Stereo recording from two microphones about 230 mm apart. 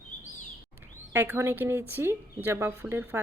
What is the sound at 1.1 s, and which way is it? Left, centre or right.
Speech, centre.